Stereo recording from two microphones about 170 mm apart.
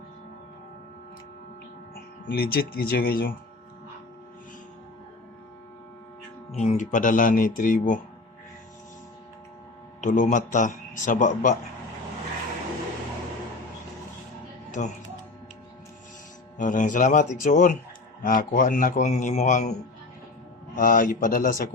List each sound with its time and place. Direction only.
2.2 s speech: 60° left (ahead or behind)
6.5 s a man's voice: 40° left (ahead or behind)
10.0 s a man's voice: 50° left (ahead or behind)
14.7 s speech: 45° left (ahead or behind)
16.6 s a man's voice: 50° left (ahead or behind)